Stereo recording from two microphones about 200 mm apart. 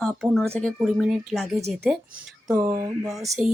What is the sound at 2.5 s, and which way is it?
Speech, 15° right (ahead or behind).